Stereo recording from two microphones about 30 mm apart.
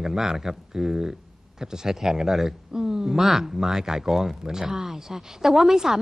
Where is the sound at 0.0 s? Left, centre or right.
Centre.